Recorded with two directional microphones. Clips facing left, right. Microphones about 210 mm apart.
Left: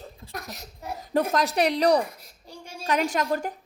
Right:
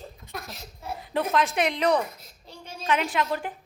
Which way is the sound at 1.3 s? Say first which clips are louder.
Left 2 dB; 35° left (ahead or behind).